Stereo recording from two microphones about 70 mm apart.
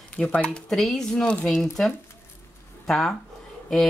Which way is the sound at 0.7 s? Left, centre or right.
Centre.